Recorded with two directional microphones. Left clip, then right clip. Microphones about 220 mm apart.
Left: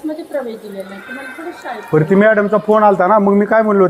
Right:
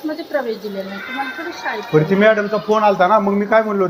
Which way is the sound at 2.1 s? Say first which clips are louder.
Left 5 dB; 40° left (ahead or behind).